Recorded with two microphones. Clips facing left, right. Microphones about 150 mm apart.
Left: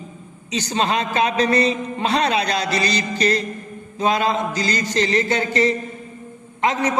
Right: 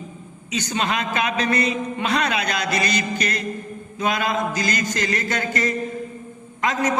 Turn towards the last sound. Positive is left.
turn(degrees=30)  # may be behind; listen again after turning